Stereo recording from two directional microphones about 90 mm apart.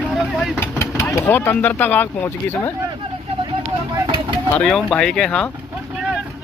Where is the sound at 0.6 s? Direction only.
25° left (ahead or behind).